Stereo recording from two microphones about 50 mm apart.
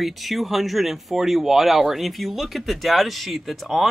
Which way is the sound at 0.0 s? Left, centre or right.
Centre.